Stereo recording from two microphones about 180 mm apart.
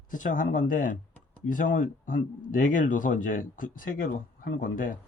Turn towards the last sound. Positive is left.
turn(degrees=50)  # may be behind; listen again after turning